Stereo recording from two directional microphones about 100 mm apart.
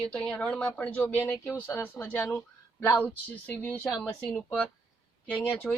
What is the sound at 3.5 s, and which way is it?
A woman's voice, 20° left (ahead or behind).